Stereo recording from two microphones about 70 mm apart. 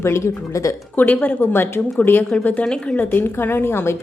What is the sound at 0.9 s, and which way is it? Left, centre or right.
Speech, left.